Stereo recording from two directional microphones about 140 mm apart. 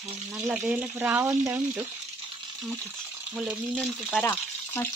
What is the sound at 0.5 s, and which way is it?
Speech, 10° right (ahead or behind).